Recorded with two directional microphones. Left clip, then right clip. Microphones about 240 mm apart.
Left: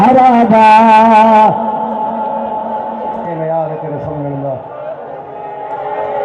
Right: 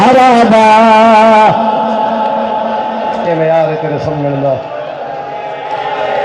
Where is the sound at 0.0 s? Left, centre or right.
Right.